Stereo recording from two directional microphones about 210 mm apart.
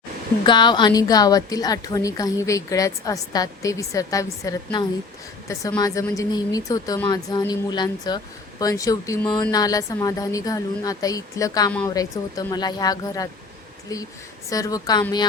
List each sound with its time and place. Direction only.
0.4 s a woman's voice: 20° left (ahead or behind)